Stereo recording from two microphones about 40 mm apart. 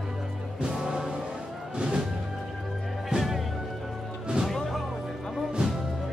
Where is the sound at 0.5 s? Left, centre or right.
Centre.